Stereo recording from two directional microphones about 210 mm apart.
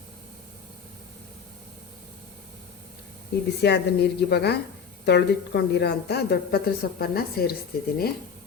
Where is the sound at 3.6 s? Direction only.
55° left (ahead or behind).